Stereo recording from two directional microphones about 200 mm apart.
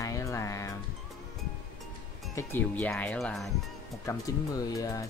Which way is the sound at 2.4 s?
10° left (ahead or behind).